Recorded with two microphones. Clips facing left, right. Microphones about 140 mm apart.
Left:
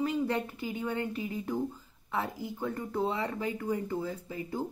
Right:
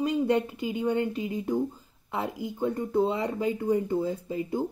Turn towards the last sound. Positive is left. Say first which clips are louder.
# right 6 dB
turn(degrees=-20)  # may be behind; listen again after turning